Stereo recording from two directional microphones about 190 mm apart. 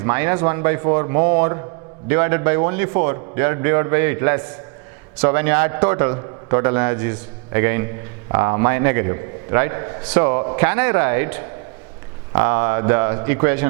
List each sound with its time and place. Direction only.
0.0 s a man's voice: 15° right (ahead or behind)